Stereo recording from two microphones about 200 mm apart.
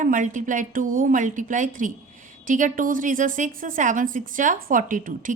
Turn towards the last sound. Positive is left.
turn(degrees=-45)  # may be behind; listen again after turning